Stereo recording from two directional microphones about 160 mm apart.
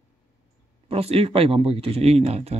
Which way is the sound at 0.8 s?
35° right (ahead or behind).